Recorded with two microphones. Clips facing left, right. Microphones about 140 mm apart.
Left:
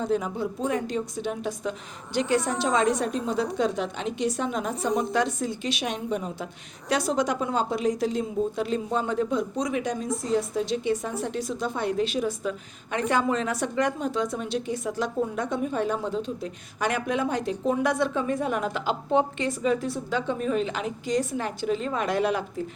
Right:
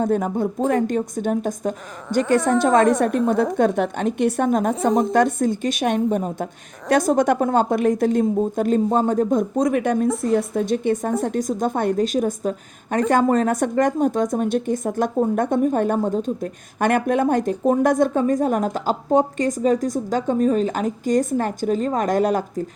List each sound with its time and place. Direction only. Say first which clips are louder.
0.0 s speech: right 6 dB; 50° right (ahead or behind)